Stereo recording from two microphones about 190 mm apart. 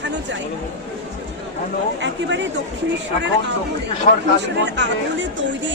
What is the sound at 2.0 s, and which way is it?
Speech, 70° right (ahead or behind).